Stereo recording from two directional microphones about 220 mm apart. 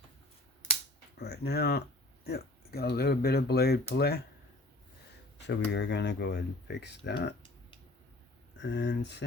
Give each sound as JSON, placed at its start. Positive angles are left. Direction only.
{"t": 1.2, "sound": "speech", "side_deg": 45}
{"t": 5.5, "sound": "speech", "side_deg": 50}
{"t": 8.5, "sound": "speech", "side_deg": 55}